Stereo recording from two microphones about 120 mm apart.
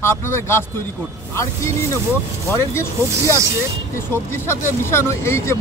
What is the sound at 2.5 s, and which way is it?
Speech, 20° left (ahead or behind).